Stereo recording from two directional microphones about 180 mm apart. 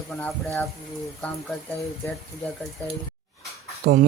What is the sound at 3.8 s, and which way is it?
Speech, 55° right (ahead or behind).